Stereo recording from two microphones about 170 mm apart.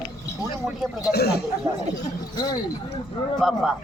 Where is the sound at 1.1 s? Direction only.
70° left (ahead or behind).